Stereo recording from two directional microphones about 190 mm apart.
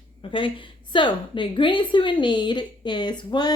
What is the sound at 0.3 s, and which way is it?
A woman's voice, 25° left (ahead or behind).